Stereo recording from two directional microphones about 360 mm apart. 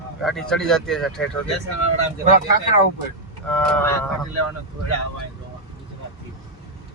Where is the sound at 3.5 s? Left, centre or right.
Centre.